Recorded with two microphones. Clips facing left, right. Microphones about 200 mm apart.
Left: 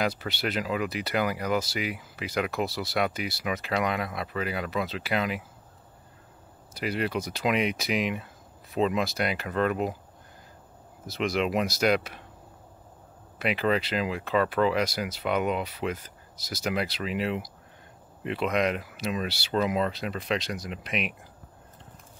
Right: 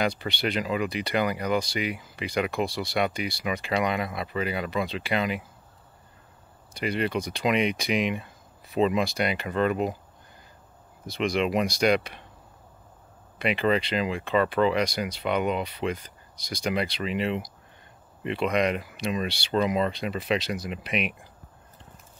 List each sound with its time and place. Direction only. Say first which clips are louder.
0.0 s speech: right 2 dB; 5° left (ahead or behind)
6.7 s speech: right 2 dB; 5° left (ahead or behind)
11.1 s speech: right 2 dB; centre (ahead or behind)
13.4 s speech: right 2 dB; 5° left (ahead or behind)